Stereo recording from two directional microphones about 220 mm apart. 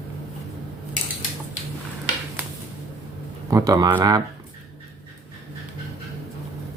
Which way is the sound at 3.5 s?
15° right (ahead or behind).